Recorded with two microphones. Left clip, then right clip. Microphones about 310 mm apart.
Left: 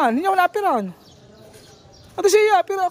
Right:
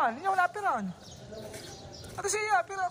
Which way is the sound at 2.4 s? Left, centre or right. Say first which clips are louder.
Left 11 dB; left.